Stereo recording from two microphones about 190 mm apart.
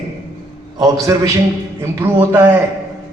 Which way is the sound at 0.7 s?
20° right (ahead or behind).